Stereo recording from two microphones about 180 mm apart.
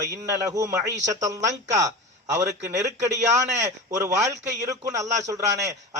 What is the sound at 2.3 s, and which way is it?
A man's voice, 15° right (ahead or behind).